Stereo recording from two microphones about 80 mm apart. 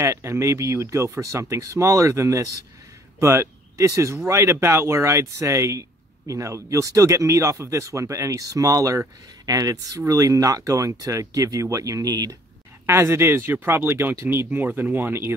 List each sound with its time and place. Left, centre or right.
0.0 s speech: right
12.8 s speech: right